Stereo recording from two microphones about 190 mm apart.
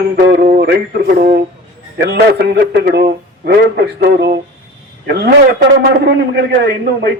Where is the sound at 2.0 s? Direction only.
60° right (ahead or behind).